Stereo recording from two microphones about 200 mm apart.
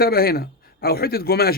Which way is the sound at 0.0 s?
50° left (ahead or behind).